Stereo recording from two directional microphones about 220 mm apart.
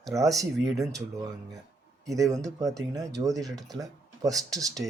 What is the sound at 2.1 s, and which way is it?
Speech, 15° right (ahead or behind).